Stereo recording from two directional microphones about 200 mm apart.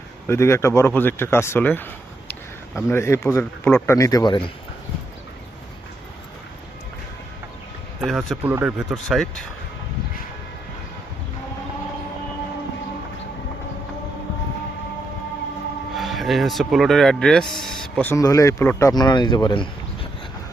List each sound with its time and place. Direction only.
0.3 s speech: 15° left (ahead or behind)
8.0 s speech: centre (ahead or behind)
16.0 s speech: centre (ahead or behind); by 20.1 s 25° left (ahead or behind)